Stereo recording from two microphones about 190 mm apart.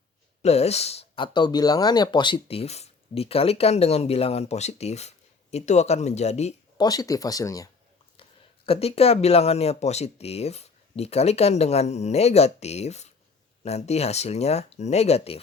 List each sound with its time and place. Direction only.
0.4 s speech: 35° left (ahead or behind)
6.7 s speech: 20° left (ahead or behind)
8.6 s speech: 30° left (ahead or behind)